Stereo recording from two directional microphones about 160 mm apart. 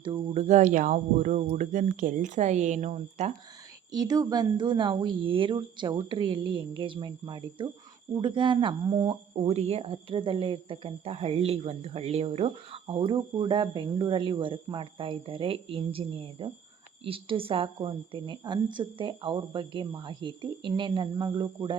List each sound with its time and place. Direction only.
0.0 s speech: 30° right (ahead or behind)
0.3 s speech: 45° right (ahead or behind)
3.9 s a woman's voice: 25° right (ahead or behind)
9.3 s a woman's voice: 40° right (ahead or behind)